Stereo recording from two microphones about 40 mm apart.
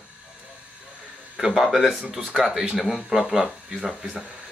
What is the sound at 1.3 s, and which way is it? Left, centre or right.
Speech, centre.